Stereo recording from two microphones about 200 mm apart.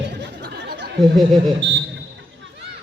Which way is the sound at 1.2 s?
Centre (ahead or behind).